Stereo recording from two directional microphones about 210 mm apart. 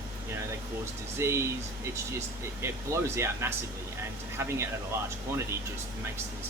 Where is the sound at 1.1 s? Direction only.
10° right (ahead or behind).